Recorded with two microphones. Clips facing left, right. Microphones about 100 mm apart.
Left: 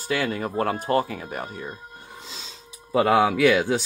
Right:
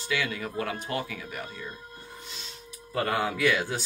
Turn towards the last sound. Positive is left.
turn(degrees=75)  # may be behind; listen again after turning